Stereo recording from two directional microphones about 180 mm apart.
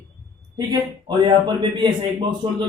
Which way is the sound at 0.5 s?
25° right (ahead or behind).